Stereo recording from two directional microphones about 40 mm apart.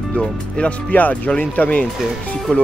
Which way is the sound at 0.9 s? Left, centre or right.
Left.